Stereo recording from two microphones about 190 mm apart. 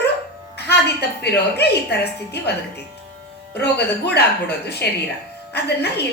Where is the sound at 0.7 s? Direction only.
60° left (ahead or behind).